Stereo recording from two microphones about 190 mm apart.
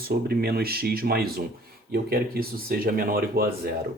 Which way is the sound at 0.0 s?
55° right (ahead or behind).